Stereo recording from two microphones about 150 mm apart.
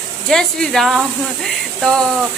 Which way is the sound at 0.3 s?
5° left (ahead or behind).